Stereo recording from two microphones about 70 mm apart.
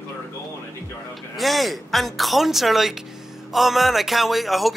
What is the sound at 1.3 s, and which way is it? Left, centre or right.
Speech, centre.